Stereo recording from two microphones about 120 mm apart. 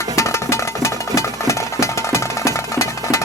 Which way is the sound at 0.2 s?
25° left (ahead or behind).